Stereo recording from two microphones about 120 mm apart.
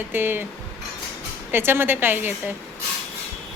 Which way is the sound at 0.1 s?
15° right (ahead or behind).